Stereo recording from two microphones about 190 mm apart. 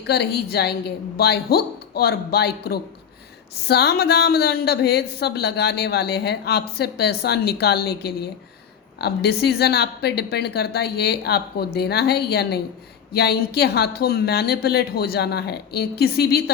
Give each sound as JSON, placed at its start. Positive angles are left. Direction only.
{"t": 0.0, "sound": "a woman's voice", "side_deg": 60}